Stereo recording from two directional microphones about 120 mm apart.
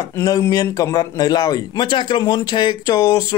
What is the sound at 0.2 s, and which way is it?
A man's voice, 30° left (ahead or behind).